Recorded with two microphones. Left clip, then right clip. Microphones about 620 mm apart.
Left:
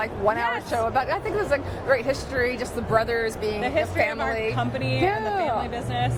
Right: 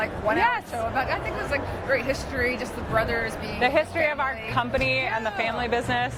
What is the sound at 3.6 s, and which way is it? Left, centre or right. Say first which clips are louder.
Speech: right 3 dB; right.